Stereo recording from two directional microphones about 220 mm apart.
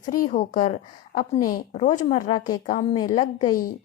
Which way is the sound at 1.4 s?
15° left (ahead or behind).